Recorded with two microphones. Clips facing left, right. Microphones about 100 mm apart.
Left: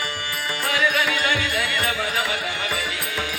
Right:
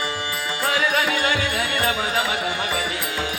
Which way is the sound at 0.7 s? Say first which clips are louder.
Right 1 dB; 35° right (ahead or behind).